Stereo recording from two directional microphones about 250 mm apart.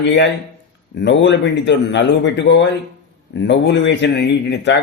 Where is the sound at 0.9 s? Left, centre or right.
Left.